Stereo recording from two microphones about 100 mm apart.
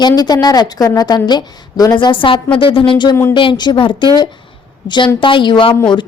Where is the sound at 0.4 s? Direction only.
40° left (ahead or behind).